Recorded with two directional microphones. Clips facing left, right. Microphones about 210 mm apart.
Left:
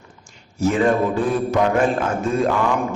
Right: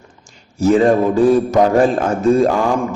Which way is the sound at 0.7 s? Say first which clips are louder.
Right 6 dB; 35° right (ahead or behind).